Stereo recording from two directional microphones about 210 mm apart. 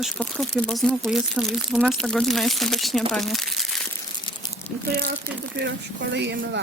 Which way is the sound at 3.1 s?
Centre (ahead or behind).